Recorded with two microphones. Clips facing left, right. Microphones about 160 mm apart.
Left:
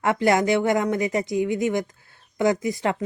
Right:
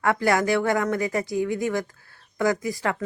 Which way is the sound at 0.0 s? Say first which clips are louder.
Left 2 dB; 20° left (ahead or behind).